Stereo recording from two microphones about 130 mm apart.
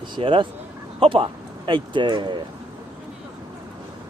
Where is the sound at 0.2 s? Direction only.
45° right (ahead or behind).